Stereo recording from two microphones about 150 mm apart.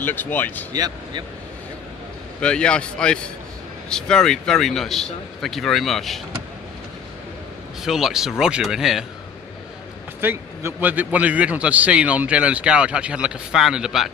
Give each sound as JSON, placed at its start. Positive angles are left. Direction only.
{"t": 0.0, "sound": "a man's voice", "side_deg": 15}
{"t": 0.7, "sound": "speech", "side_deg": -25}
{"t": 2.4, "sound": "a man's voice", "side_deg": 5}
{"t": 7.8, "sound": "speech", "side_deg": -5}
{"t": 10.2, "sound": "a man's voice", "side_deg": -15}